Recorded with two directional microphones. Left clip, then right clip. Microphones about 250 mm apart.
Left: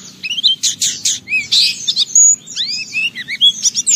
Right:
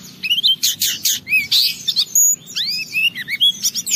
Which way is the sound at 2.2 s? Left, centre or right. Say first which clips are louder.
Left 5 dB; centre.